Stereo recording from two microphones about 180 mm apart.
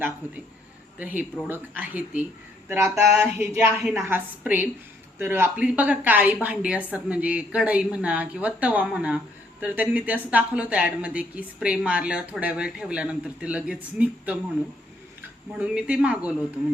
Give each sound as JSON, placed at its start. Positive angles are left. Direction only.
{"t": 0.9, "sound": "a woman's voice", "side_deg": -10}
{"t": 15.5, "sound": "a woman's voice", "side_deg": -5}